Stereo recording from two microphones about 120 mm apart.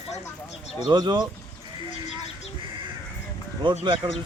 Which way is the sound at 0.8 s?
35° right (ahead or behind).